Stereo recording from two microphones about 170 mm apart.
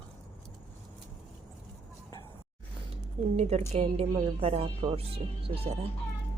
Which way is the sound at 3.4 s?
40° right (ahead or behind).